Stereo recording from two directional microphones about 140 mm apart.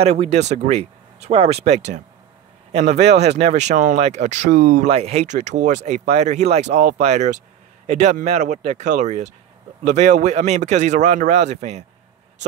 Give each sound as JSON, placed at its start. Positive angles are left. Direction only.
{"t": 0.0, "sound": "a man's voice", "side_deg": -50}